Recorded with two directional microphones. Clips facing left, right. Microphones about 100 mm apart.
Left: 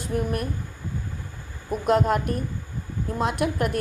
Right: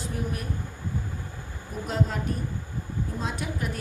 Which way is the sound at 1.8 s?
65° left (ahead or behind).